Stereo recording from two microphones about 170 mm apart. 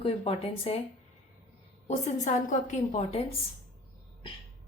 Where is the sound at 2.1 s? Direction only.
45° left (ahead or behind).